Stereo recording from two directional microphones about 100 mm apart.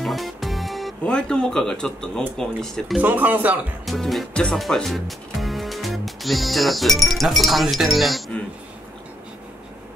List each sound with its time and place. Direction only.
0.0 s music: centre (ahead or behind)
1.0 s speech: 10° left (ahead or behind)
3.0 s speech: 15° right (ahead or behind)
3.8 s speech: centre (ahead or behind)